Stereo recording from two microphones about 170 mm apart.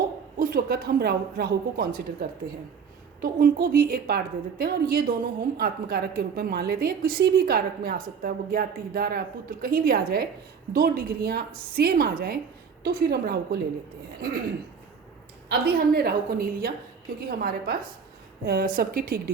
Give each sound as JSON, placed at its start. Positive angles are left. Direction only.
{"t": 0.3, "sound": "a woman's voice", "side_deg": -60}
{"t": 15.4, "sound": "a woman's voice", "side_deg": -65}